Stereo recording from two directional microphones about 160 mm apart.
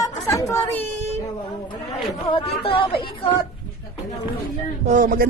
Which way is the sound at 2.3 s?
35° left (ahead or behind).